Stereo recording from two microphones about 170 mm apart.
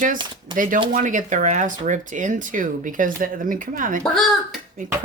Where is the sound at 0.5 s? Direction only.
50° right (ahead or behind).